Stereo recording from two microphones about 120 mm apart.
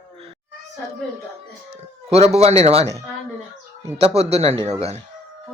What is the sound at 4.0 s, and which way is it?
Speech, 55° right (ahead or behind).